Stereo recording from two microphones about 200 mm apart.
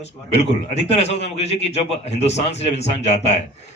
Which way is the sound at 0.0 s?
30° left (ahead or behind).